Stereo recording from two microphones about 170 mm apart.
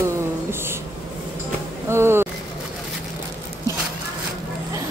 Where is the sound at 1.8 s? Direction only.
15° right (ahead or behind).